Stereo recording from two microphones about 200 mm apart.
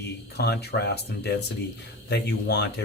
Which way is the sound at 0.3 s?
55° left (ahead or behind).